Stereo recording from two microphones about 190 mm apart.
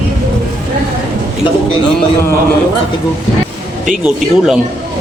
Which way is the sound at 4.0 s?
5° right (ahead or behind).